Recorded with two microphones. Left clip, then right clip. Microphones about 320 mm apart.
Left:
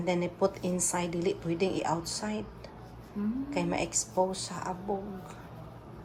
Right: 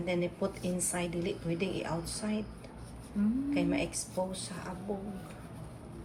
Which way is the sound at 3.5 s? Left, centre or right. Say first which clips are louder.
Left 4 dB; centre.